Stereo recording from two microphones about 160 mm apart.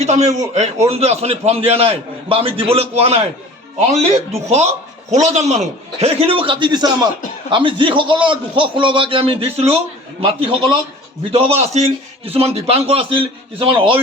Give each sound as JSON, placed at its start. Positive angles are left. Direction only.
{"t": 0.0, "sound": "a man's voice", "side_deg": -45}
{"t": 4.4, "sound": "a man's voice", "side_deg": -40}